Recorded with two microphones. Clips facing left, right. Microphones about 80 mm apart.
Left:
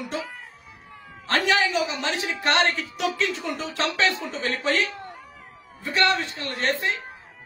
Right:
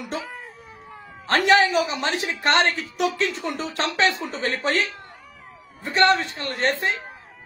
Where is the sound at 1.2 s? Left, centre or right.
Right.